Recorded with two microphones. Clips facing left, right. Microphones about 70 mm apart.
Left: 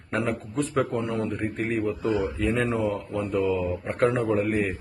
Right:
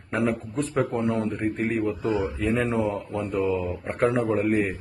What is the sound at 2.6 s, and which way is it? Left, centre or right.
Mantra, right.